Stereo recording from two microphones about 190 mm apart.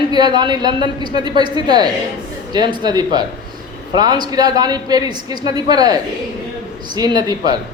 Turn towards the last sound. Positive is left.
turn(degrees=-20)  # may be behind; listen again after turning